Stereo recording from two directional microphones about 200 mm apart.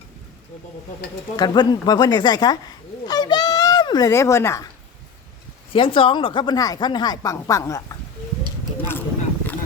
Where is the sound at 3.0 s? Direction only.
20° left (ahead or behind).